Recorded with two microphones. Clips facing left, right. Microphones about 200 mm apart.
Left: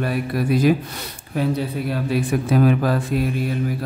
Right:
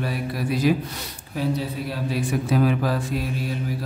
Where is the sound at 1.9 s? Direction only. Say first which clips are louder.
Left 4 dB; 60° left (ahead or behind).